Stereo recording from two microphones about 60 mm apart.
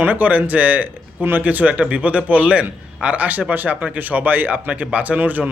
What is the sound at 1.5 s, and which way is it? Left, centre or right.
Speech, right.